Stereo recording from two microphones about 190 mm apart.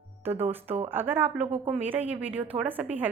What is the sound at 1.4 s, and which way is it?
Speech, 35° right (ahead or behind).